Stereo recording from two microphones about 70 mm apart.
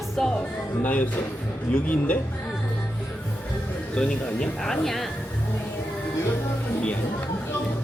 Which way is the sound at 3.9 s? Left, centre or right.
Centre.